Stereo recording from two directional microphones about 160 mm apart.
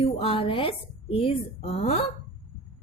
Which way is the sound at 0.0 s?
35° left (ahead or behind).